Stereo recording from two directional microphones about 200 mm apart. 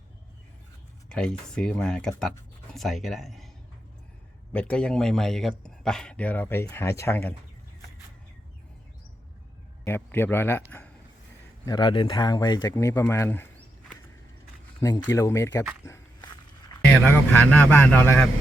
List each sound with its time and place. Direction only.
1.1 s speech: 5° left (ahead or behind)
4.5 s speech: 5° left (ahead or behind)
9.8 s speech: 10° left (ahead or behind)
11.6 s speech: 20° left (ahead or behind)
14.8 s speech: 15° left (ahead or behind)
17.0 s speech: 10° left (ahead or behind)